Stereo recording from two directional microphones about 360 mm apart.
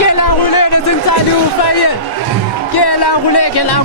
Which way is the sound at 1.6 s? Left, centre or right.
Left.